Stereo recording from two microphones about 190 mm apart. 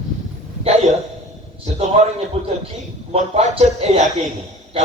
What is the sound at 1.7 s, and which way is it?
Speech, 35° right (ahead or behind).